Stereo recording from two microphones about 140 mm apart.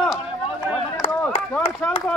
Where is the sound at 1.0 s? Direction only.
45° left (ahead or behind).